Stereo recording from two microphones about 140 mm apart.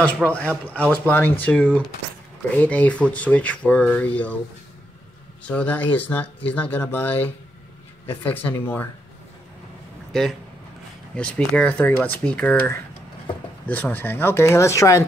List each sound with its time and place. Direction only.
0.2 s a man's voice: centre (ahead or behind)
0.8 s speech: 10° left (ahead or behind)
5.4 s speech: 10° left (ahead or behind)
11.1 s speech: 5° left (ahead or behind)